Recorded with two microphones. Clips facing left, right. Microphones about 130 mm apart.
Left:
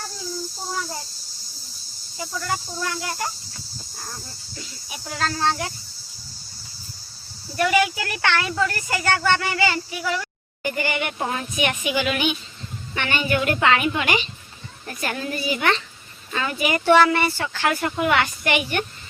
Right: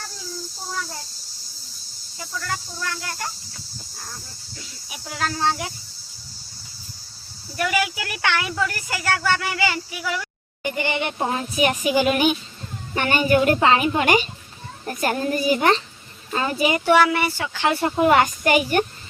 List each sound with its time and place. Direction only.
2.1 s speech: 20° left (ahead or behind)
4.5 s speech: centre (ahead or behind)
7.5 s speech: centre (ahead or behind)
10.6 s speech: 20° right (ahead or behind)
14.0 s speech: 45° right (ahead or behind)
16.7 s speech: 10° right (ahead or behind)
17.7 s speech: 25° right (ahead or behind)